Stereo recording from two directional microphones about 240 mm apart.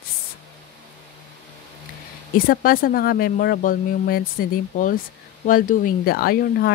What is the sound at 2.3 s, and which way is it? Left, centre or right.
Speech, left.